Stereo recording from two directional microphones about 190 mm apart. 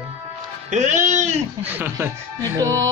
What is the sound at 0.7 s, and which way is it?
Speech, 40° right (ahead or behind).